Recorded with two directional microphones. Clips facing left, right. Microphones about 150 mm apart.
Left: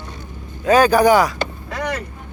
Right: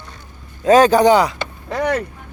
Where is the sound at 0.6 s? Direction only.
30° right (ahead or behind).